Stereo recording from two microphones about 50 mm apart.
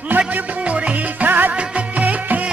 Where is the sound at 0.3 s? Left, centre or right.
Right.